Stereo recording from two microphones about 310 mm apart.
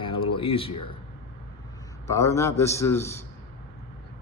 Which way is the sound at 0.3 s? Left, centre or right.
Centre.